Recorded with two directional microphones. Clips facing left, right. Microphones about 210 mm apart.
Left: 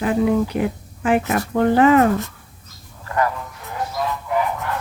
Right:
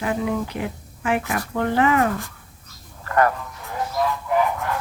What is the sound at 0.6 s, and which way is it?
Speech, 30° left (ahead or behind).